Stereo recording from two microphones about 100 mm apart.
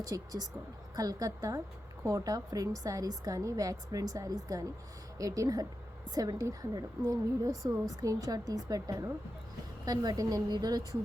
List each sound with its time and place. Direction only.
0.1 s a woman's voice: 35° right (ahead or behind)